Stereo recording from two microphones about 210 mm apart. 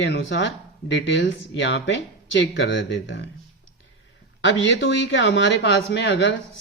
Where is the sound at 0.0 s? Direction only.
55° left (ahead or behind).